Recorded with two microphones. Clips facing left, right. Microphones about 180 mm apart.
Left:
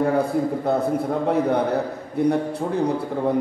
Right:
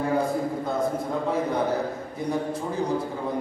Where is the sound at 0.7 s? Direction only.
65° left (ahead or behind).